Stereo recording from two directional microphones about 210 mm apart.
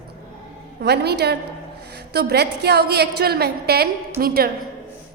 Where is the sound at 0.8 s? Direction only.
50° right (ahead or behind).